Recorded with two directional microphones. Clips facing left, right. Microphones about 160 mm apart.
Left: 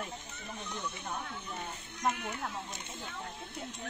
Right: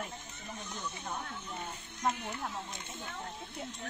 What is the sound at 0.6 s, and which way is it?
Speech, 60° left (ahead or behind).